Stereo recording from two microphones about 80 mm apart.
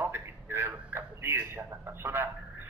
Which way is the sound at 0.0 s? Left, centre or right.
Right.